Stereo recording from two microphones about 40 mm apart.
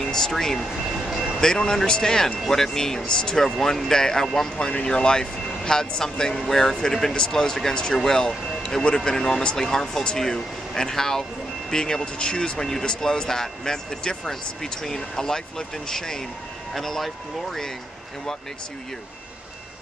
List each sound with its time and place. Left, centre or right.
0.0 s speech: centre
3.4 s speech: centre
9.6 s speech: centre